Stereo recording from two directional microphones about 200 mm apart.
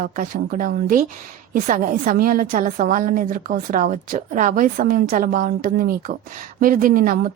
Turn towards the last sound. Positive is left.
turn(degrees=-45)  # may be behind; listen again after turning